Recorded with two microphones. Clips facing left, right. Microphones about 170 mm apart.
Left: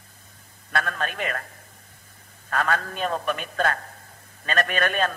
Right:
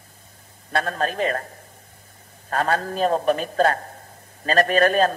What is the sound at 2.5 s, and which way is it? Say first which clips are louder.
A man's voice: right 3 dB; 35° right (ahead or behind).